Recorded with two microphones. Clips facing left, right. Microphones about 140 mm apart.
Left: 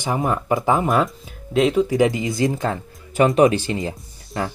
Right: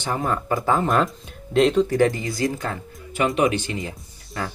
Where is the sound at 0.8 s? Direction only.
Centre (ahead or behind).